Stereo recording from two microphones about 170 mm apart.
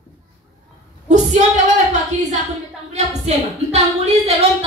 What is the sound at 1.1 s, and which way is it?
A woman's voice, 45° right (ahead or behind).